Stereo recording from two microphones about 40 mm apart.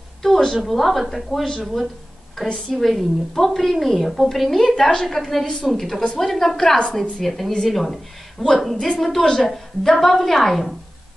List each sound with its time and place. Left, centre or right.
0.2 s a sound: centre
0.6 s a woman's voice: centre
2.7 s a woman's voice: centre
8.7 s a woman's voice: centre
9.4 s a woman's voice: centre